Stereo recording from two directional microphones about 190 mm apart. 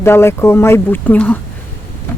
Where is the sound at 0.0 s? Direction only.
15° left (ahead or behind).